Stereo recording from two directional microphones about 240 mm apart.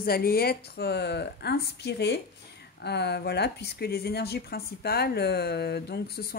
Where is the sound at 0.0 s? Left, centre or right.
Left.